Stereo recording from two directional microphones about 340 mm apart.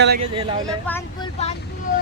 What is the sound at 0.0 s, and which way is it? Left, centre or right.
Speech, right.